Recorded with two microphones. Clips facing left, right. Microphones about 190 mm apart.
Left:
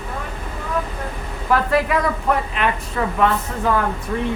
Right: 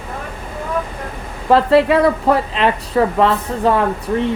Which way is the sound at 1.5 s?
30° right (ahead or behind).